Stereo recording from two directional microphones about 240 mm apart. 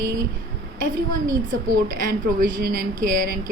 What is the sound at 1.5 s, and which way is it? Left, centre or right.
A woman's voice, right.